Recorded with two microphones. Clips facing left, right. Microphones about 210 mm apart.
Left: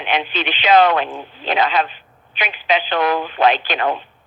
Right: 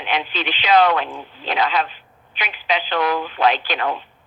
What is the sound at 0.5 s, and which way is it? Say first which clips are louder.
Speech: left 2 dB; 25° left (ahead or behind).